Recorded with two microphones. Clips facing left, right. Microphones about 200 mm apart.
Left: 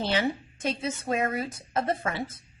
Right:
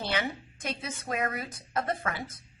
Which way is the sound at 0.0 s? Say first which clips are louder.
Left 5 dB; 30° left (ahead or behind).